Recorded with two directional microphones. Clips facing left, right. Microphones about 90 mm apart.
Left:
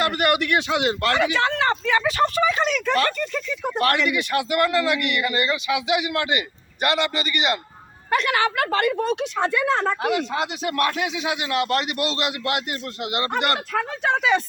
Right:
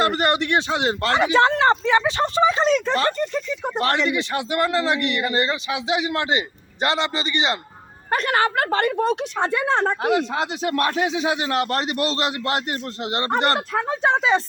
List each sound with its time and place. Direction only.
0.0 s speech: 30° right (ahead or behind)
8.1 s a woman's voice: 40° right (ahead or behind)